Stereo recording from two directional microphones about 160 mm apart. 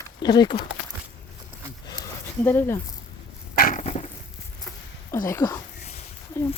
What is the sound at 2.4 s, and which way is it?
Speech, 15° left (ahead or behind).